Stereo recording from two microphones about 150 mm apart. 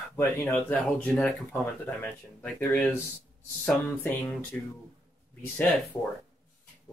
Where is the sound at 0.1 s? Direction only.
15° left (ahead or behind).